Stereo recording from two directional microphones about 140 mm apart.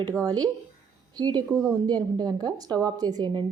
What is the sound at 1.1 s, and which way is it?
A woman's voice, 30° right (ahead or behind).